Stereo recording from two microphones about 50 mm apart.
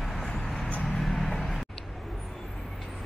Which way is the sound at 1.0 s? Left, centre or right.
Centre.